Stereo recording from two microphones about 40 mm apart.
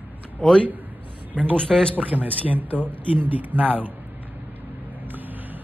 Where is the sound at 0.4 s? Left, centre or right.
Left.